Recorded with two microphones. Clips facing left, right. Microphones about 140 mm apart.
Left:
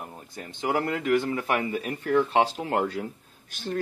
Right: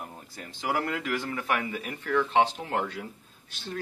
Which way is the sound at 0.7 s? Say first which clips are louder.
Left 6 dB; 35° left (ahead or behind).